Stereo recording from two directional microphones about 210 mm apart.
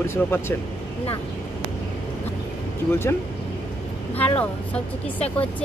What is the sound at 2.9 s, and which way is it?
Speech, 10° left (ahead or behind).